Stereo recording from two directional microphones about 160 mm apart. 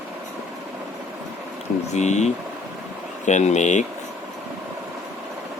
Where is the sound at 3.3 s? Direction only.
45° left (ahead or behind).